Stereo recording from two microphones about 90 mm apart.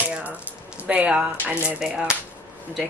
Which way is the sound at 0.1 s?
15° right (ahead or behind).